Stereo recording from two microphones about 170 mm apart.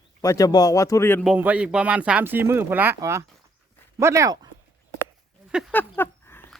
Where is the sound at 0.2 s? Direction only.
20° left (ahead or behind).